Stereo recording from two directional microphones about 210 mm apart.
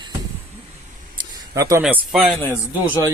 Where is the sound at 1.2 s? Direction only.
15° right (ahead or behind).